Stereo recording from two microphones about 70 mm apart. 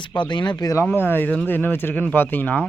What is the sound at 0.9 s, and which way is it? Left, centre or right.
Speech, left.